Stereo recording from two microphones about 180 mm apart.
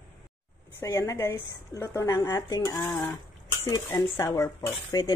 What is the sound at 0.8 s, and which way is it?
A woman's voice, 15° left (ahead or behind).